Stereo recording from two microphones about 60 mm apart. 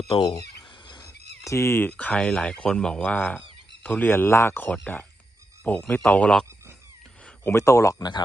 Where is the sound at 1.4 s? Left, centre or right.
Left.